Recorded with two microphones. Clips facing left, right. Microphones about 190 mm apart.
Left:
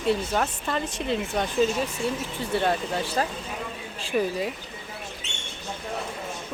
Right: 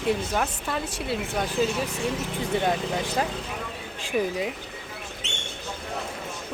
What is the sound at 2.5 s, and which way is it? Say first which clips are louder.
Speech: left 1 dB; 15° right (ahead or behind).